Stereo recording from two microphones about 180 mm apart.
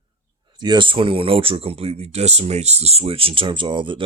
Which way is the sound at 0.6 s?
25° right (ahead or behind).